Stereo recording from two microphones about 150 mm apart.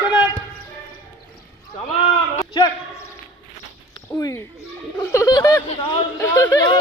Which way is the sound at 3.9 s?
25° left (ahead or behind).